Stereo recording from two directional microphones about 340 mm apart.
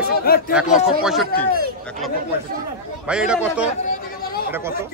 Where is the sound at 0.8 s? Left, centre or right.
Centre.